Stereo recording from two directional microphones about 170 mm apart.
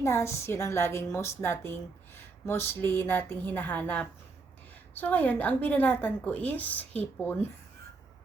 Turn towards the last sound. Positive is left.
turn(degrees=10)  # may be behind; listen again after turning